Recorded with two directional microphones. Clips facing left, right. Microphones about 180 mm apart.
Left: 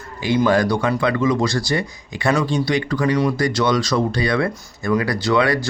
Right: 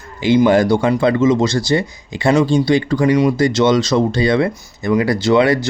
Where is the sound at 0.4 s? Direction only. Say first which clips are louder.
Right 2 dB; 25° right (ahead or behind).